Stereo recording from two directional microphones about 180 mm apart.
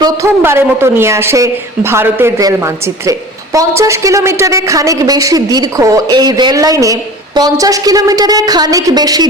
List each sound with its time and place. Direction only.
0.0 s speech: 15° right (ahead or behind)